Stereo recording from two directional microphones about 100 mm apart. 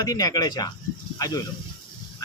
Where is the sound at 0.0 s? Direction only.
40° left (ahead or behind).